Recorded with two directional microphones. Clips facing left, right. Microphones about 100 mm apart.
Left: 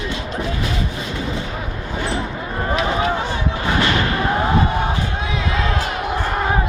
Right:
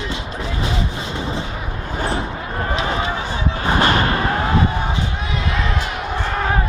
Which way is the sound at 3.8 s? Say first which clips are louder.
Right 3 dB; 45° right (ahead or behind).